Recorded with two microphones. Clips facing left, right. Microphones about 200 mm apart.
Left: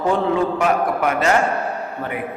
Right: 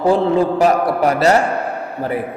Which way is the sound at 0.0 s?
35° right (ahead or behind).